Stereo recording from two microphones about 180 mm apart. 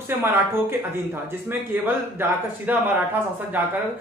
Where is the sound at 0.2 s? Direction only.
15° right (ahead or behind).